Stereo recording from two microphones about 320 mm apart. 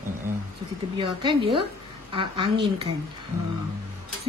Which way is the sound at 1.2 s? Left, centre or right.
Centre.